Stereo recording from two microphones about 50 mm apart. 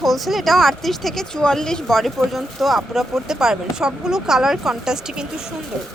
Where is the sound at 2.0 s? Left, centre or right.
Centre.